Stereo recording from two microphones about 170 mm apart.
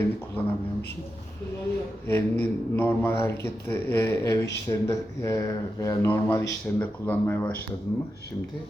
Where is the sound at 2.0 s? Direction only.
15° left (ahead or behind).